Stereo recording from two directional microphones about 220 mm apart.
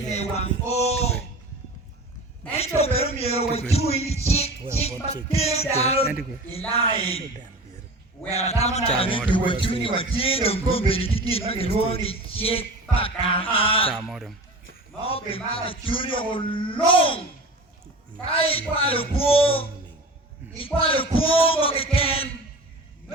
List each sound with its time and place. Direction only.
0.1 s a sound: 30° left (ahead or behind)
0.7 s music: 30° left (ahead or behind)
2.6 s music: 30° left (ahead or behind)
8.4 s music: 30° left (ahead or behind)
13.9 s a man's voice: centre (ahead or behind)
15.0 s music: 25° left (ahead or behind)
18.3 s music: 25° left (ahead or behind)